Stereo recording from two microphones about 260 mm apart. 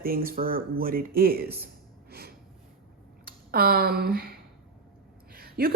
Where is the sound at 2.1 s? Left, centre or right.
Right.